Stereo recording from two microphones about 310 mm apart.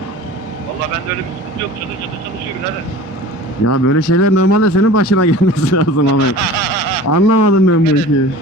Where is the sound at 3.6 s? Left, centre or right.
Left.